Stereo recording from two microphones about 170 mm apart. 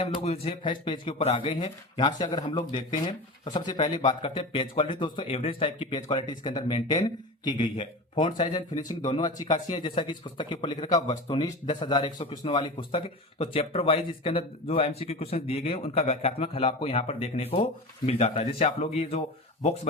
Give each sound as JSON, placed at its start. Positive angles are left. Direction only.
{"t": 0.2, "sound": "speech", "side_deg": 35}
{"t": 9.1, "sound": "a man's voice", "side_deg": 25}